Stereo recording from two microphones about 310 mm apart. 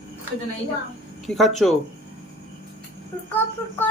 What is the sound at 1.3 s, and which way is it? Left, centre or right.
Speech, centre.